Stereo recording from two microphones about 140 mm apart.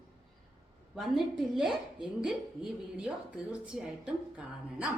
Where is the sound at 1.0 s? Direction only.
Centre (ahead or behind).